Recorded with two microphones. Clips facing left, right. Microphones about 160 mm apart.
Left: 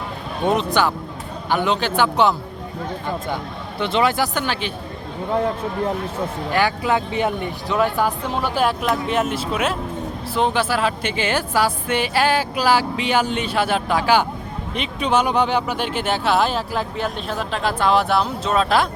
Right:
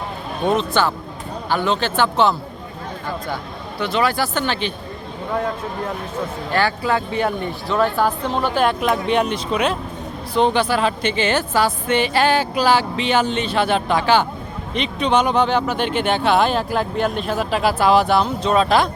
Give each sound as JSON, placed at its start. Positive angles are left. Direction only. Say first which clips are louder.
{"t": 0.4, "sound": "a woman's voice", "louder": "even", "side_deg": 15}
{"t": 3.8, "sound": "speech", "louder": "left 1 dB", "side_deg": 25}
{"t": 6.5, "sound": "a woman's voice", "louder": "even", "side_deg": 15}